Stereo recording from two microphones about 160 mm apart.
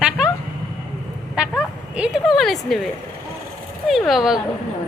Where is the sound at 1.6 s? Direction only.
5° right (ahead or behind).